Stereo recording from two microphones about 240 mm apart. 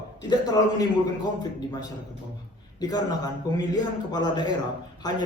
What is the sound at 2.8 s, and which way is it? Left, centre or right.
A man's voice, centre.